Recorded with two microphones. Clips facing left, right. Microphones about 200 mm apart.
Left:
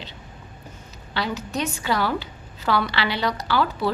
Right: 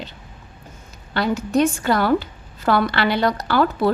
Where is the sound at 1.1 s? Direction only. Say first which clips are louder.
Right 8 dB; 50° right (ahead or behind).